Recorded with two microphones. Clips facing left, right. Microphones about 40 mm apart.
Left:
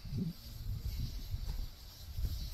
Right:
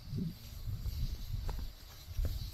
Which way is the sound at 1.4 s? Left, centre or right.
Right.